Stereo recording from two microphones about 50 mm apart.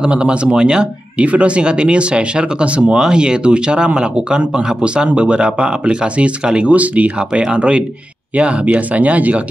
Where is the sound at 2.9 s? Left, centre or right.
Centre.